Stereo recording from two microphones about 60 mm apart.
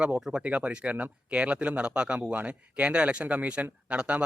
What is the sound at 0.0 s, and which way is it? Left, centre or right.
Speech, centre.